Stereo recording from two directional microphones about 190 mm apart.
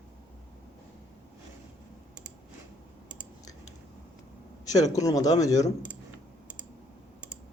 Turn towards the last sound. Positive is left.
turn(degrees=20)  # may be behind; listen again after turning